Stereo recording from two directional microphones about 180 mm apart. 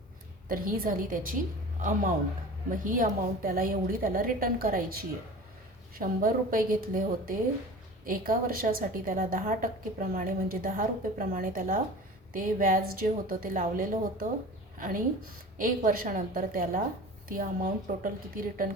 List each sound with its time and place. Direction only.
0.4 s a woman's voice: 50° right (ahead or behind)